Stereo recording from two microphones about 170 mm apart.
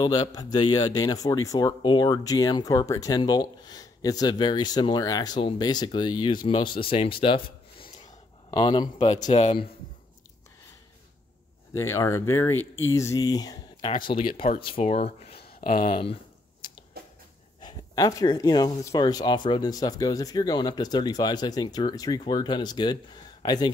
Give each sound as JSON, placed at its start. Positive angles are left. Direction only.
{"t": 0.0, "sound": "a man's voice", "side_deg": 25}
{"t": 11.7, "sound": "speech", "side_deg": 15}
{"t": 15.6, "sound": "speech", "side_deg": 50}
{"t": 15.9, "sound": "speech", "side_deg": 35}
{"t": 16.6, "sound": "a sound", "side_deg": 30}
{"t": 17.6, "sound": "a man's voice", "side_deg": 25}